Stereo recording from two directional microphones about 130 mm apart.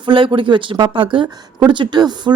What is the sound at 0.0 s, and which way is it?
Speech, 40° right (ahead or behind).